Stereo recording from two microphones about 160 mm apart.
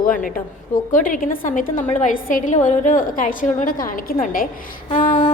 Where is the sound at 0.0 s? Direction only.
60° left (ahead or behind).